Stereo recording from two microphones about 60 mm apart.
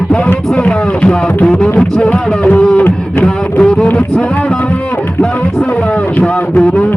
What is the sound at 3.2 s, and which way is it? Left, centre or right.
Music, centre.